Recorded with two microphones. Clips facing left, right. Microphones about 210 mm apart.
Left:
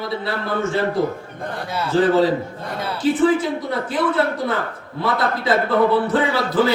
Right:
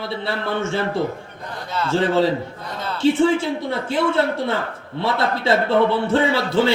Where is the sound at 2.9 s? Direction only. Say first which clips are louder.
Even; 25° right (ahead or behind).